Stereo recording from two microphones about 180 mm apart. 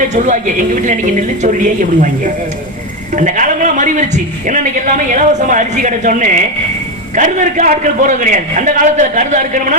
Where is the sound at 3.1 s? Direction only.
45° right (ahead or behind).